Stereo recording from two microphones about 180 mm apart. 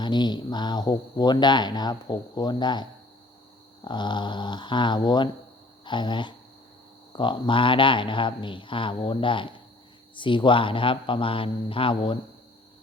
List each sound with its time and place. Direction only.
0.0 s speech: 25° left (ahead or behind)
3.8 s speech: 25° left (ahead or behind)